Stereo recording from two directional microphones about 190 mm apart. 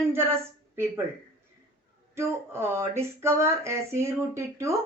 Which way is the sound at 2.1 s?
15° right (ahead or behind).